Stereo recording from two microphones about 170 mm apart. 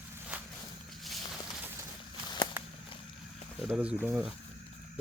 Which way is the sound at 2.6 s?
10° right (ahead or behind).